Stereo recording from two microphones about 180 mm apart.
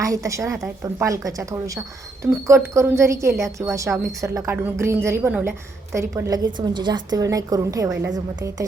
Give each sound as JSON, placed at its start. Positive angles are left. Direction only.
{"t": 0.0, "sound": "a woman's voice", "side_deg": -20}